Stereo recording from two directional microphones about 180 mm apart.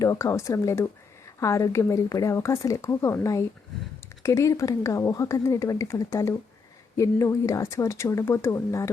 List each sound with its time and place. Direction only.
0.0 s speech: 15° left (ahead or behind)